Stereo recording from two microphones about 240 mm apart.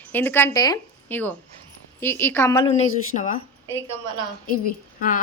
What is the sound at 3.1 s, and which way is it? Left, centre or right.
Speech, left.